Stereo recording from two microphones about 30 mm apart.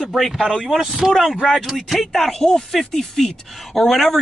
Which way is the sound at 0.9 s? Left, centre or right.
Centre.